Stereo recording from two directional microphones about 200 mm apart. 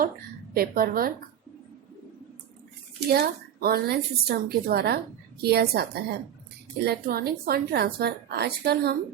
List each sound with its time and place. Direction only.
0.5 s a woman's voice: 50° right (ahead or behind)
3.1 s a woman's voice: 50° right (ahead or behind)